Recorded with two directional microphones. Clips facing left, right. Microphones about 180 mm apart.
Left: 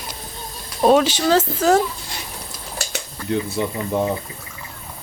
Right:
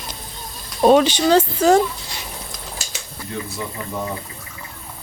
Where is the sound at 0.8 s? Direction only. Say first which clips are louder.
Right 2 dB; centre (ahead or behind).